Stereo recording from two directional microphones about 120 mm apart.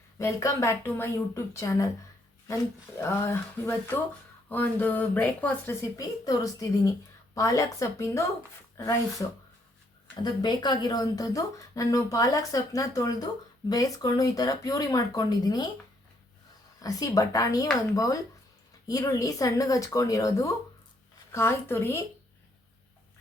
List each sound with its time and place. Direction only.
0.2 s a woman's voice: 25° left (ahead or behind)
3.0 s a woman's voice: 20° left (ahead or behind)
6.0 s a woman's voice: 30° left (ahead or behind)
10.2 s a woman's voice: 35° left (ahead or behind)
16.8 s a woman's voice: 30° left (ahead or behind)